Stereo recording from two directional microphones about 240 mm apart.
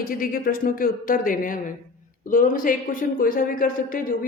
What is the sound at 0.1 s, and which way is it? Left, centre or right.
A woman's voice, left.